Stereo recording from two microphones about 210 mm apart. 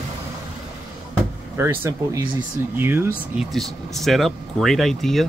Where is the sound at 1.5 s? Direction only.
10° right (ahead or behind).